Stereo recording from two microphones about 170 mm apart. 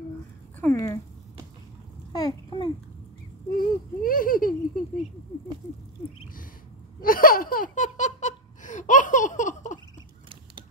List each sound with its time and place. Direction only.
0.6 s speech: 15° left (ahead or behind)
2.1 s a child's voice: 25° left (ahead or behind)
3.4 s speech: 60° left (ahead or behind)
7.0 s laughter: 55° left (ahead or behind)